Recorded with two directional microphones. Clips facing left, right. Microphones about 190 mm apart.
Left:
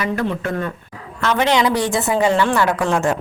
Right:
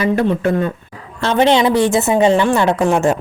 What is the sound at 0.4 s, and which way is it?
A woman's voice, 20° right (ahead or behind).